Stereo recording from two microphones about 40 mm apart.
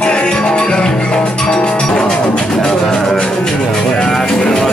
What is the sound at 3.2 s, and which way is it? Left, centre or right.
Speech, centre.